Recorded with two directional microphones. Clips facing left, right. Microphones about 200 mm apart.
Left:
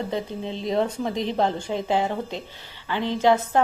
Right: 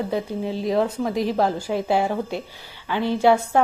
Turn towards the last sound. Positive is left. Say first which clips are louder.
# right 2 dB
turn(degrees=-10)  # may be behind; listen again after turning